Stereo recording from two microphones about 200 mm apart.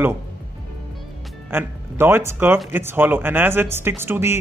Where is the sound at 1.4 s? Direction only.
10° right (ahead or behind).